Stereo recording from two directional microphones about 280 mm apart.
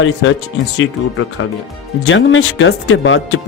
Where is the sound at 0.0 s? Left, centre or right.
Left.